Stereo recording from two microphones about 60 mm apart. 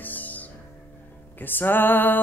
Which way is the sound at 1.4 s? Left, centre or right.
Left.